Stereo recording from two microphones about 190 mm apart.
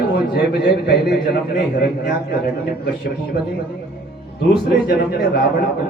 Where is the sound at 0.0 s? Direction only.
60° left (ahead or behind).